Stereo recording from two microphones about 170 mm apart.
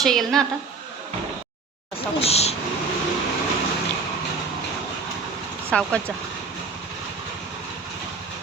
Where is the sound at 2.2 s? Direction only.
35° left (ahead or behind).